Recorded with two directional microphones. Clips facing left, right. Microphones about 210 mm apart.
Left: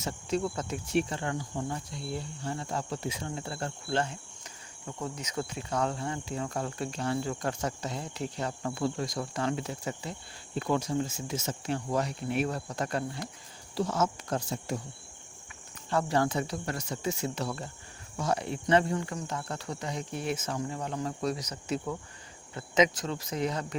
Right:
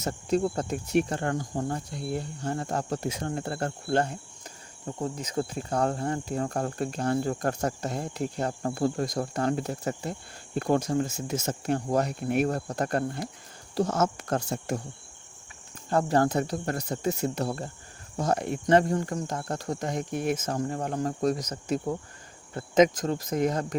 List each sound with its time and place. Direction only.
0.0 s speech: 45° right (ahead or behind)
0.4 s cricket: 35° right (ahead or behind)
0.9 s speech: 45° right (ahead or behind)
4.9 s cricket: 30° right (ahead or behind)
5.3 s speech: 35° right (ahead or behind); by 8.2 s 50° right (ahead or behind)
8.4 s speech: 40° right (ahead or behind)
15.9 s speech: 40° right (ahead or behind)
17.2 s speech: 60° right (ahead or behind)
17.4 s cricket: 40° right (ahead or behind)
18.2 s speech: 45° right (ahead or behind)